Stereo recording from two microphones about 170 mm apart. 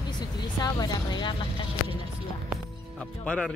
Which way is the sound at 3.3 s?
Centre (ahead or behind).